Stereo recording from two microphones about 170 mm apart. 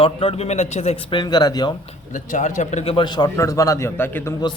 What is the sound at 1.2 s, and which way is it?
Speech, 25° left (ahead or behind).